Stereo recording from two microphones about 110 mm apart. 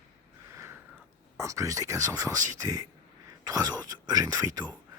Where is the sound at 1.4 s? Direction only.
30° right (ahead or behind).